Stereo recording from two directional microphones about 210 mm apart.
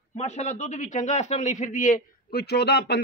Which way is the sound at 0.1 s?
30° left (ahead or behind).